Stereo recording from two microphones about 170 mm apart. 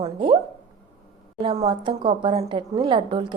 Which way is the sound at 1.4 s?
30° right (ahead or behind).